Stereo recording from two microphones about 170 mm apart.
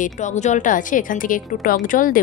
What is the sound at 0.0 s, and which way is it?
A woman's voice, 45° left (ahead or behind).